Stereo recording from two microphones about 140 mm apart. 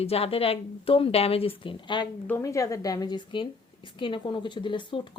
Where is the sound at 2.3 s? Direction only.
20° left (ahead or behind); by 5.0 s 35° left (ahead or behind).